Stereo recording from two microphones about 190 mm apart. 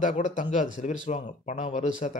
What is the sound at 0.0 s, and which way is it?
Speech, 40° left (ahead or behind).